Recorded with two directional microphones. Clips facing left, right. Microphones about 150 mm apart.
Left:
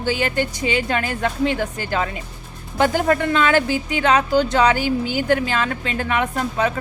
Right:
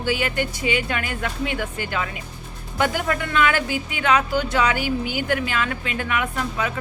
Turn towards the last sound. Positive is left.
turn(degrees=35)  # may be behind; listen again after turning